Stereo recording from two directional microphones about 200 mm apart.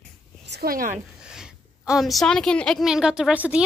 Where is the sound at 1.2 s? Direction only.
5° right (ahead or behind).